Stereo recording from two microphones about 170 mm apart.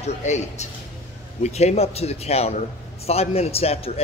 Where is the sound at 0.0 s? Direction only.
40° left (ahead or behind).